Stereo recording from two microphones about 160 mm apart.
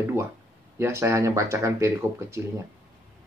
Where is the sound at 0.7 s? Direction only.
15° right (ahead or behind).